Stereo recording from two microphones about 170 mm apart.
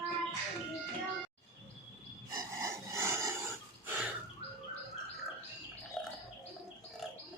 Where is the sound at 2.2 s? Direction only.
20° right (ahead or behind).